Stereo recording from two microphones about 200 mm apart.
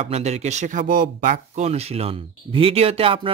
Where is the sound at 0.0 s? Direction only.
35° right (ahead or behind).